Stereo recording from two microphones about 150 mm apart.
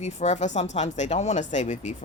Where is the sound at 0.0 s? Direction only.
50° left (ahead or behind).